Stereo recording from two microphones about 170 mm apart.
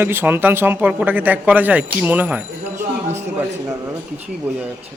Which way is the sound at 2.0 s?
10° right (ahead or behind).